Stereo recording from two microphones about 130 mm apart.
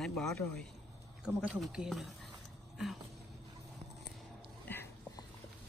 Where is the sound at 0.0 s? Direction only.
5° left (ahead or behind).